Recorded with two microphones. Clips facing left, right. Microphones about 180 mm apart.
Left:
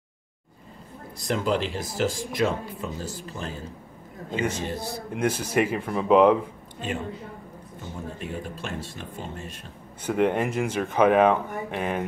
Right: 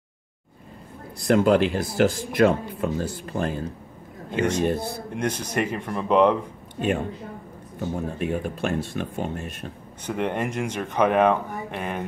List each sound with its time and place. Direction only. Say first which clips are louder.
1.2 s speech: right 7 dB; 60° right (ahead or behind)
4.6 s speech: right 6 dB; 55° right (ahead or behind)
5.1 s speech: left 3 dB; 5° left (ahead or behind)
6.8 s speech: right 6 dB; 60° right (ahead or behind)
10.0 s speech: left 3 dB; 10° left (ahead or behind)